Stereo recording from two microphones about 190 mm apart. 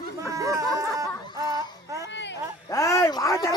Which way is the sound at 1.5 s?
15° right (ahead or behind).